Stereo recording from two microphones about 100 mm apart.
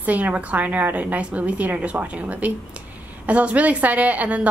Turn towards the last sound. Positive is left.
turn(degrees=-15)  # may be behind; listen again after turning